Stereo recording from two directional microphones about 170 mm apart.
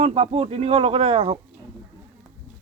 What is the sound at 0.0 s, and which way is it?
Speech, 35° right (ahead or behind).